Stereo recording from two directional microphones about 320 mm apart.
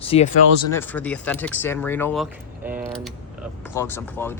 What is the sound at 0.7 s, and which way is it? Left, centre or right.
Speech, centre.